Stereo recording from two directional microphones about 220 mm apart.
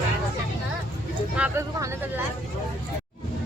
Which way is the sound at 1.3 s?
10° right (ahead or behind).